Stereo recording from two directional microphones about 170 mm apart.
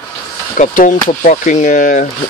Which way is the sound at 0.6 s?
50° left (ahead or behind).